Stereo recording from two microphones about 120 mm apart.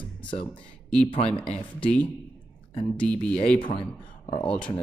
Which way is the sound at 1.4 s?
10° left (ahead or behind).